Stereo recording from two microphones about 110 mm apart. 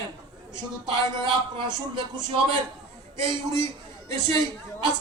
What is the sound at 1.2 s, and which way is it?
Speech, 45° right (ahead or behind).